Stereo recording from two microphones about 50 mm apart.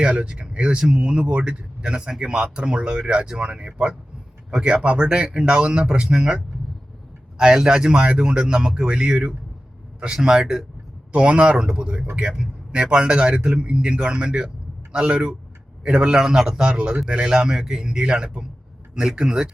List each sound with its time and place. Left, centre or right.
0.1 s a man's voice: centre
11.1 s a man's voice: right
16.6 s a man's voice: right